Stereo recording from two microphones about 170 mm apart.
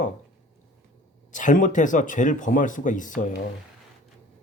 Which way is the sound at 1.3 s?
50° left (ahead or behind).